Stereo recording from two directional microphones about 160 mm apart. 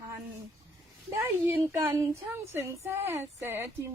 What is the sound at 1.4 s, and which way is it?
Speech, 10° right (ahead or behind).